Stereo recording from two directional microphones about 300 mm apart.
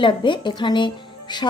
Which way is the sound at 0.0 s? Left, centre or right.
Centre.